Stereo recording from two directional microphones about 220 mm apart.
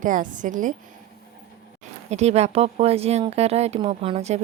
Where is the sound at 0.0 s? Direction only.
35° right (ahead or behind).